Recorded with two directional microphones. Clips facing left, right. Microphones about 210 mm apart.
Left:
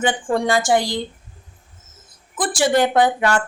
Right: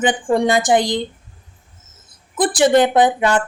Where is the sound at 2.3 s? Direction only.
20° right (ahead or behind).